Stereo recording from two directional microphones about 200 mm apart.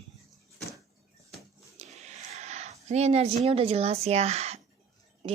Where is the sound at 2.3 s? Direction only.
35° right (ahead or behind).